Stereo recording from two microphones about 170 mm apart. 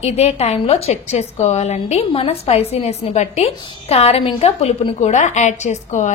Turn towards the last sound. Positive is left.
turn(degrees=45)  # may be behind; listen again after turning